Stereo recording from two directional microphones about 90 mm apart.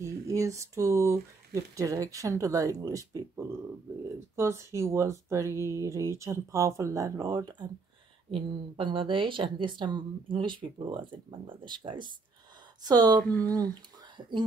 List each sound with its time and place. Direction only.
0.0 s speech: 35° right (ahead or behind)
8.3 s a woman's voice: 70° right (ahead or behind)
12.8 s speech: 50° right (ahead or behind)